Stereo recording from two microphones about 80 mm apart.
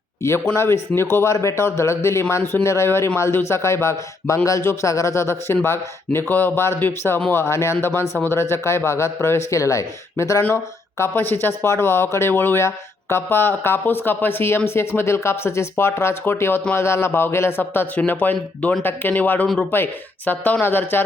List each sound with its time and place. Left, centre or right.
0.2 s speech: left